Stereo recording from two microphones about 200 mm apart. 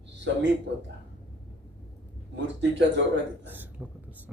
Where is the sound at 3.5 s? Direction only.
10° right (ahead or behind).